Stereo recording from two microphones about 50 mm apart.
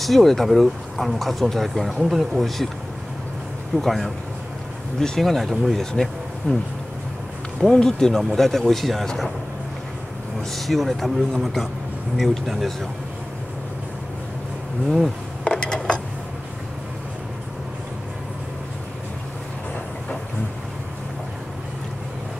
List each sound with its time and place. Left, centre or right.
0.0 s speech: centre
3.7 s speech: centre
6.5 s speech: left
7.7 s speech: centre
10.5 s speech: centre
15.4 s a sound: centre